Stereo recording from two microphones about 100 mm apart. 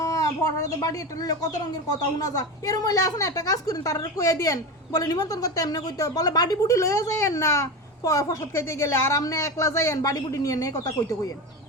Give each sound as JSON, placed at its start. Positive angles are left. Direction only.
{"t": 0.0, "sound": "a woman's voice", "side_deg": 35}